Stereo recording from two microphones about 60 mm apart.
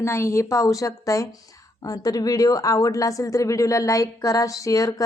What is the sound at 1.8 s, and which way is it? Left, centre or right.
A woman's voice, left.